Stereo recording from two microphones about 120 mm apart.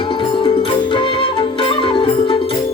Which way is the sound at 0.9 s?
45° left (ahead or behind).